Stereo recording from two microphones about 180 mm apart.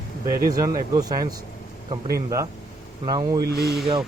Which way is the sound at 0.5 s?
20° right (ahead or behind).